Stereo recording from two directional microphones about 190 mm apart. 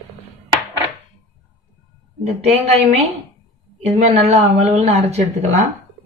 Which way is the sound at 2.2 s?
35° right (ahead or behind).